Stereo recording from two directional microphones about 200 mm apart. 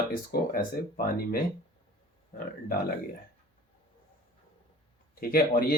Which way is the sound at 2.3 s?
45° left (ahead or behind).